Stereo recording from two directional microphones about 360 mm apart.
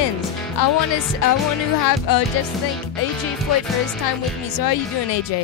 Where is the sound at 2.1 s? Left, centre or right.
Left.